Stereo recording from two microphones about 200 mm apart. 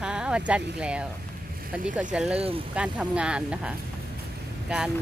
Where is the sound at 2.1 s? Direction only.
5° right (ahead or behind).